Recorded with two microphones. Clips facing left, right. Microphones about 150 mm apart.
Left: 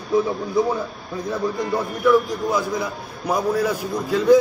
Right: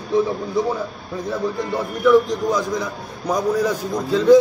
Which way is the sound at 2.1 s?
5° left (ahead or behind).